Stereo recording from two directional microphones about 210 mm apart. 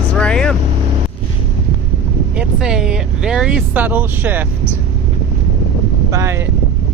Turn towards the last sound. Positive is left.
turn(degrees=-15)  # may be behind; listen again after turning